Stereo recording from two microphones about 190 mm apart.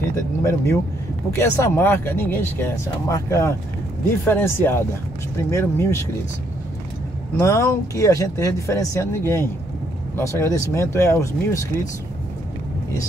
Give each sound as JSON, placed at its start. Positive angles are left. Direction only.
{"t": 0.1, "sound": "speech", "side_deg": 15}
{"t": 7.3, "sound": "speech", "side_deg": 15}